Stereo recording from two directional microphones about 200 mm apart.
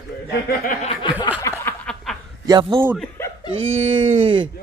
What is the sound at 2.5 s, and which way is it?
Speech, 25° right (ahead or behind).